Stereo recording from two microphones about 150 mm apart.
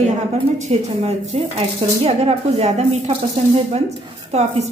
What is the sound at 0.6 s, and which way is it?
Speech, 45° right (ahead or behind).